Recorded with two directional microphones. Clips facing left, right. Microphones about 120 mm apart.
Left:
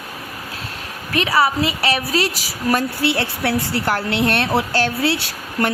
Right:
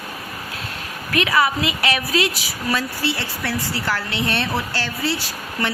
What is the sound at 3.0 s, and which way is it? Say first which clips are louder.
Speech: left 5 dB; 60° left (ahead or behind).